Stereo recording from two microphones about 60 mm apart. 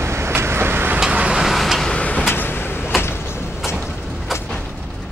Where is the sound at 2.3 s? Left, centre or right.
Left.